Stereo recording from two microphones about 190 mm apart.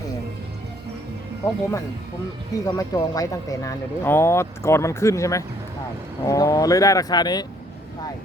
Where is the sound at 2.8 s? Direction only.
20° left (ahead or behind).